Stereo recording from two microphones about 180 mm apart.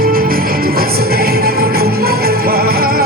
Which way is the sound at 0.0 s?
55° right (ahead or behind).